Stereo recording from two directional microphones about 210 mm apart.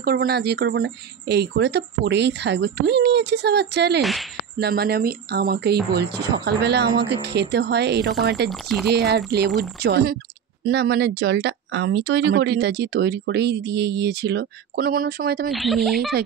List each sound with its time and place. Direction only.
0.0 s speech: 45° right (ahead or behind)
4.0 s speech: centre (ahead or behind)
4.6 s speech: 50° right (ahead or behind)
8.5 s speech: centre (ahead or behind)
9.8 s speech: 50° right (ahead or behind)
15.5 s speech: centre (ahead or behind)